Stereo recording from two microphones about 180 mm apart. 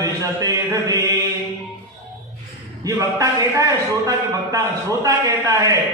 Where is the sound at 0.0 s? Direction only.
20° right (ahead or behind).